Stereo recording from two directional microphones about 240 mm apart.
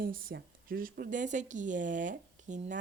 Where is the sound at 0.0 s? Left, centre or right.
Right.